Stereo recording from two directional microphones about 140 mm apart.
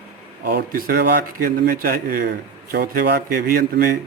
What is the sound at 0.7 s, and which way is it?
A man's voice, 90° right.